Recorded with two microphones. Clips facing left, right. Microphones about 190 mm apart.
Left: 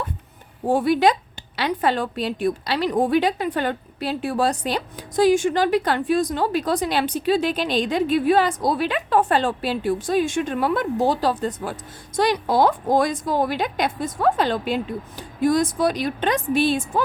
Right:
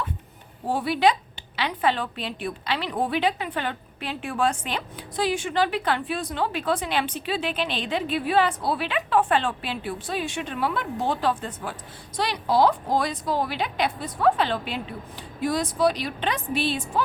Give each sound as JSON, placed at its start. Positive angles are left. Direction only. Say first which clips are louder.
{"t": 0.7, "sound": "a woman's voice", "louder": "left 4 dB", "side_deg": 45}